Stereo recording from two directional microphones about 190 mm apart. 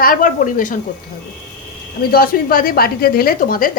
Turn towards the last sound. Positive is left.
turn(degrees=45)  # may be behind; listen again after turning